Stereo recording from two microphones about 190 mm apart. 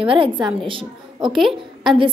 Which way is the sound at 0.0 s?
25° right (ahead or behind).